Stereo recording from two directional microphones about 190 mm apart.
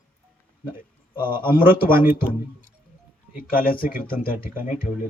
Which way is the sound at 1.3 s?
50° left (ahead or behind).